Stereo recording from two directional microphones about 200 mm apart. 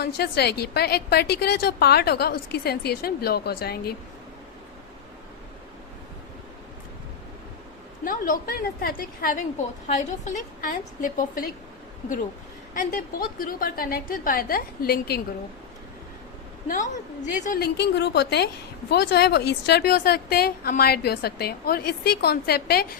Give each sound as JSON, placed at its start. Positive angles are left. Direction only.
{"t": 0.0, "sound": "a woman's voice", "side_deg": 55}
{"t": 8.0, "sound": "a woman's voice", "side_deg": 40}
{"t": 12.7, "sound": "a woman's voice", "side_deg": 40}
{"t": 16.6, "sound": "a woman's voice", "side_deg": 40}